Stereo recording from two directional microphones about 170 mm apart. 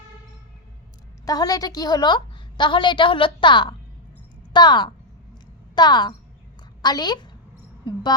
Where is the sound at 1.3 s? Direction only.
20° left (ahead or behind).